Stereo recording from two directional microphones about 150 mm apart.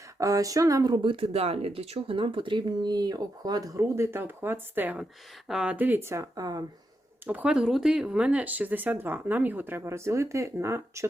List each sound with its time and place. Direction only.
0.2 s speech: 20° right (ahead or behind)
7.3 s speech: 10° right (ahead or behind)